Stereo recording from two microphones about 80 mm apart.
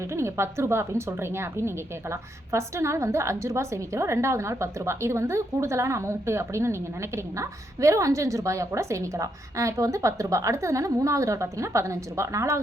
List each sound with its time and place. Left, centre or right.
0.2 s a woman's voice: right